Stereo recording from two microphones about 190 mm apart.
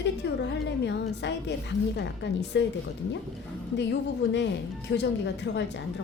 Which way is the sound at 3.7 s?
65° left (ahead or behind).